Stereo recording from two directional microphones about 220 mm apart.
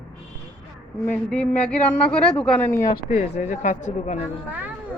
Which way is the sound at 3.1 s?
35° left (ahead or behind).